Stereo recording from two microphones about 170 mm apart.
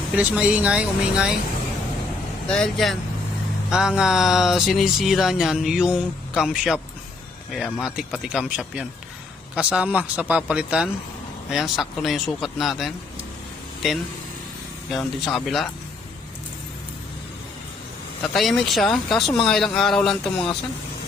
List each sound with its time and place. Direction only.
0.2 s speech: 10° right (ahead or behind)
2.5 s speech: 5° left (ahead or behind)
14.8 s speech: centre (ahead or behind)
18.2 s speech: centre (ahead or behind)